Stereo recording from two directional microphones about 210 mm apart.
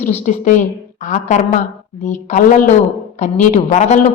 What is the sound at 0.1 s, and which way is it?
A woman's voice, 35° left (ahead or behind).